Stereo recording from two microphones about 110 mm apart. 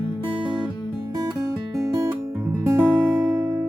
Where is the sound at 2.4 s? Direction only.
15° right (ahead or behind).